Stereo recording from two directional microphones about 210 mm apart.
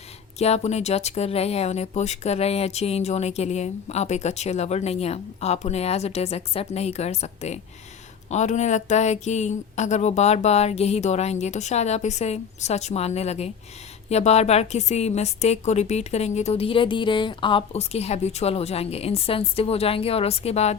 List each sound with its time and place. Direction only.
0.3 s a woman's voice: 30° left (ahead or behind)